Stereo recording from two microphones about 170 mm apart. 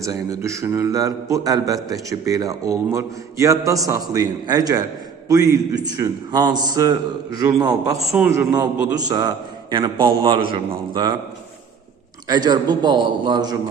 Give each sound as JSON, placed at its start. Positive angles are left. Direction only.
{"t": 0.0, "sound": "a man's voice", "side_deg": -20}
{"t": 8.0, "sound": "a man's voice", "side_deg": -5}
{"t": 8.3, "sound": "a man's voice", "side_deg": -20}
{"t": 12.3, "sound": "a man's voice", "side_deg": -25}